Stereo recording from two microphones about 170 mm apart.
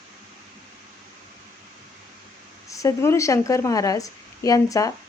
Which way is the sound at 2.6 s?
20° left (ahead or behind).